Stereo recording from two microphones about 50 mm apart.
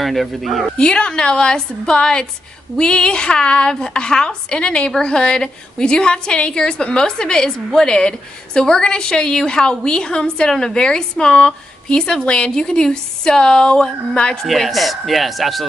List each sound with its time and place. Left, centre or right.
0.0 s speech: centre
0.7 s a woman's voice: centre
14.4 s speech: centre